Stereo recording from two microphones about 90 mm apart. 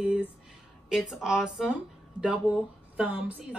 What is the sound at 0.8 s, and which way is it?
A woman's voice, 5° right (ahead or behind).